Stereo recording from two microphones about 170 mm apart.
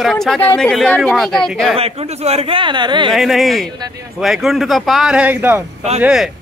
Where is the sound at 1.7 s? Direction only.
35° right (ahead or behind).